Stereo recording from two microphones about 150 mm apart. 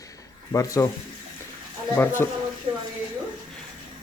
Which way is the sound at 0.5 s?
20° left (ahead or behind).